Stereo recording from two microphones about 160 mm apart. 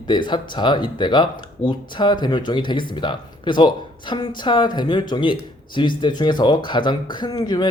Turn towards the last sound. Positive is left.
turn(degrees=25)  # may be behind; listen again after turning